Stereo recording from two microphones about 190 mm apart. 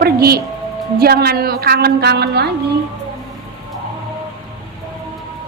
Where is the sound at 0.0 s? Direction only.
55° right (ahead or behind).